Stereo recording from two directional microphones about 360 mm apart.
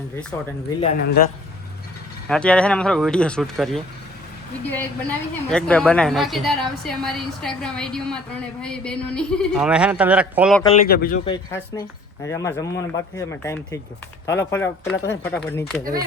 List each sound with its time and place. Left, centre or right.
0.8 s a man's voice: left
2.3 s a woman's voice: centre
10.8 s a man's voice: left
11.3 s a woman's voice: centre